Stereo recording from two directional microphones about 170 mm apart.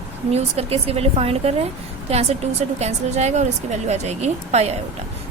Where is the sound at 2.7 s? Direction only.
40° right (ahead or behind).